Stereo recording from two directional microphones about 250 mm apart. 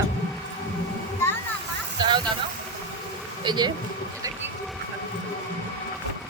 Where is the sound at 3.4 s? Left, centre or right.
Centre.